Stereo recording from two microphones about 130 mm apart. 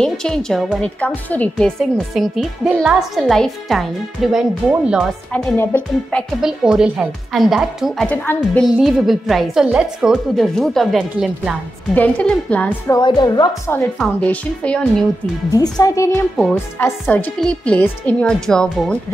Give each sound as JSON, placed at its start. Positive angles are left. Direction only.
{"t": 0.0, "sound": "speech", "side_deg": 5}
{"t": 5.3, "sound": "a child's voice", "side_deg": 15}
{"t": 6.4, "sound": "speech", "side_deg": -5}
{"t": 8.1, "sound": "a child's voice", "side_deg": 10}
{"t": 8.6, "sound": "speech", "side_deg": 0}
{"t": 11.9, "sound": "a child's voice", "side_deg": 10}
{"t": 13.0, "sound": "a woman's voice", "side_deg": 35}
{"t": 13.9, "sound": "a child's voice", "side_deg": 10}
{"t": 15.5, "sound": "a woman's voice", "side_deg": 25}
{"t": 16.3, "sound": "a child's voice", "side_deg": 5}